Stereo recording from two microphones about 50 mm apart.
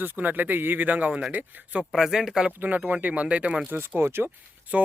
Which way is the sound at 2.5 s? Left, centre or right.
Right.